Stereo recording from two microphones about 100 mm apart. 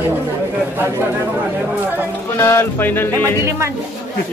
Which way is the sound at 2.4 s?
25° left (ahead or behind).